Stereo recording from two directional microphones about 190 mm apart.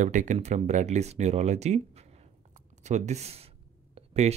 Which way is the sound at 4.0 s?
35° right (ahead or behind).